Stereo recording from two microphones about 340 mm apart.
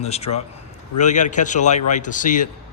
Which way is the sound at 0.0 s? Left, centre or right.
Centre.